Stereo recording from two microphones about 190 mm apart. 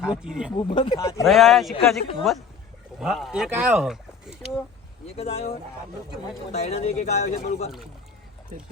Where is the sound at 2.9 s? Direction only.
Centre (ahead or behind).